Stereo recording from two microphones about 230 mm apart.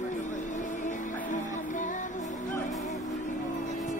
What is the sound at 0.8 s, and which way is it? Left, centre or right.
Music, left.